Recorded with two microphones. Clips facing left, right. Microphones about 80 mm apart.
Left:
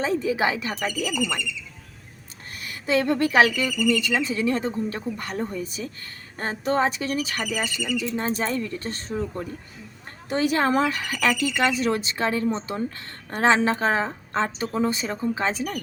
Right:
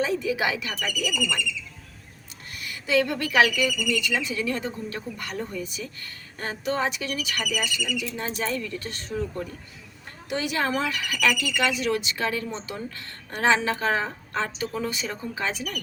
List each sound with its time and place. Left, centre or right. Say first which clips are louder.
0.0 s speech: left 2 dB; left
2.6 s speech: even; left
10.2 s speech: left 5 dB; left